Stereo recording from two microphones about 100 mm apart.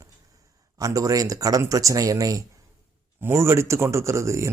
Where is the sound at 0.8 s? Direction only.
35° right (ahead or behind).